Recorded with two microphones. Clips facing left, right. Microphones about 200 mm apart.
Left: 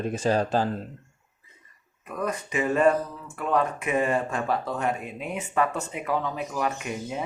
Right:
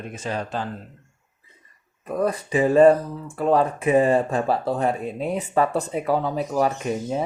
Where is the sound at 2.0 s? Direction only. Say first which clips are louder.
Right 6 dB; 35° right (ahead or behind).